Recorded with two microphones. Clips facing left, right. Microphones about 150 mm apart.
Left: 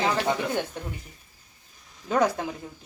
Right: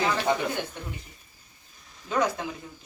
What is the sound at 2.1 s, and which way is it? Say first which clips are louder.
Speech: left 3 dB; 45° left (ahead or behind).